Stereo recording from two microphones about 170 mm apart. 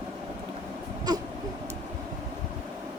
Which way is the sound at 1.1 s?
25° right (ahead or behind).